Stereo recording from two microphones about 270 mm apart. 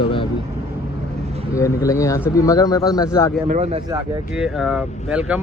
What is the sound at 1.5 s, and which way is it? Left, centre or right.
Speech, centre.